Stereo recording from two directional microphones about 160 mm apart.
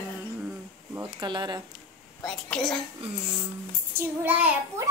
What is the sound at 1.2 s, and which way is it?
Speech, 30° right (ahead or behind).